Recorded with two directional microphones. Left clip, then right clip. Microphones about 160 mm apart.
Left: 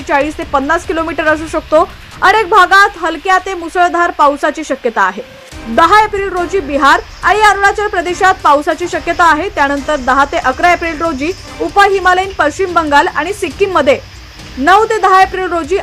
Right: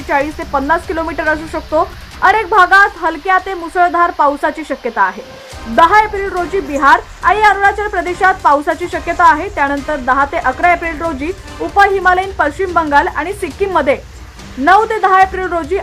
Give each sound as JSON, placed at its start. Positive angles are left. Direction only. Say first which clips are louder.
{"t": 0.1, "sound": "a woman's voice", "louder": "left 2 dB", "side_deg": 25}